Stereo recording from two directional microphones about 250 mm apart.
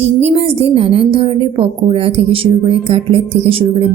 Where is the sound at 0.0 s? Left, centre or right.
Right.